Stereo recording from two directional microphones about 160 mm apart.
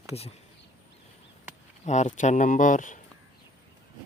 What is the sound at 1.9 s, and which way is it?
Speech, 50° left (ahead or behind).